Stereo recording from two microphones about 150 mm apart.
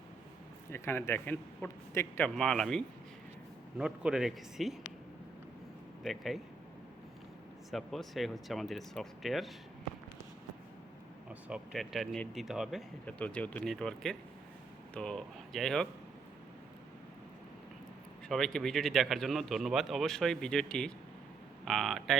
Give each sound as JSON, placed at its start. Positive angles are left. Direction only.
{"t": 0.7, "sound": "speech", "side_deg": 15}
{"t": 2.2, "sound": "speech", "side_deg": 5}
{"t": 6.0, "sound": "speech", "side_deg": 0}
{"t": 7.7, "sound": "speech", "side_deg": 0}
{"t": 11.3, "sound": "speech", "side_deg": -5}
{"t": 13.1, "sound": "speech", "side_deg": 10}
{"t": 18.3, "sound": "speech", "side_deg": 5}